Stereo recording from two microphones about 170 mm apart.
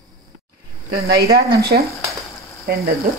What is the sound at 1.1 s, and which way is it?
Speech, 70° right (ahead or behind).